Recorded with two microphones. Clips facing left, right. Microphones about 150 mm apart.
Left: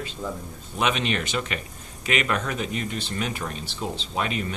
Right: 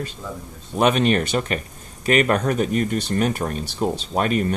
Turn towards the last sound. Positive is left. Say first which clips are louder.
# right 7 dB
turn(degrees=-45)  # may be behind; listen again after turning